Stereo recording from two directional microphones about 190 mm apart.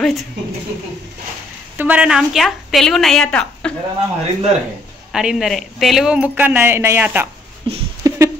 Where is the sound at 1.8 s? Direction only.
5° right (ahead or behind).